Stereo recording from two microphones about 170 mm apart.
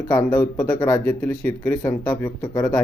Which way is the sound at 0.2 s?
10° left (ahead or behind).